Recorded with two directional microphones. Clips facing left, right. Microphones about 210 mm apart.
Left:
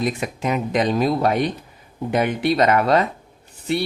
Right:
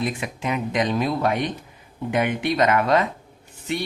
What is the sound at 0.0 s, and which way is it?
Speech, 40° left (ahead or behind).